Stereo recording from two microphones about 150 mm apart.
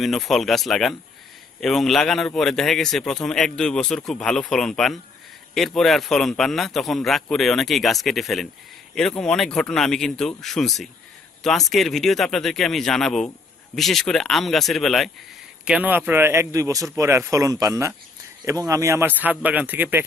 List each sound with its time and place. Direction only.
0.0 s speech: centre (ahead or behind)